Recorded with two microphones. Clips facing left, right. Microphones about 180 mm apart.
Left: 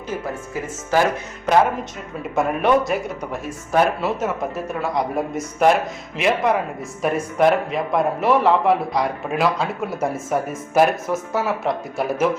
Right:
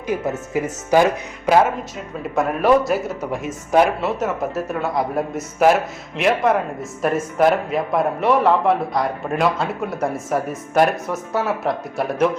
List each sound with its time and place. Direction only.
0.1 s speech: 20° right (ahead or behind)
2.3 s a man's voice: centre (ahead or behind)
3.3 s speech: 15° right (ahead or behind)
4.0 s a man's voice: centre (ahead or behind)